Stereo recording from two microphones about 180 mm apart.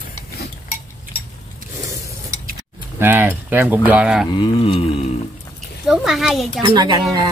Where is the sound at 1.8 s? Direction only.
20° right (ahead or behind).